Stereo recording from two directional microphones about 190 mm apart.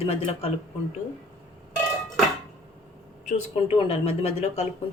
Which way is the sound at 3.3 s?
30° left (ahead or behind).